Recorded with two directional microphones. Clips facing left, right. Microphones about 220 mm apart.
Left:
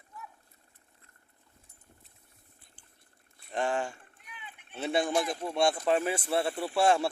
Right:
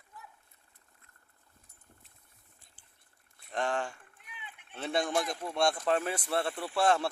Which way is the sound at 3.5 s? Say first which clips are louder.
Left 2 dB; 5° left (ahead or behind).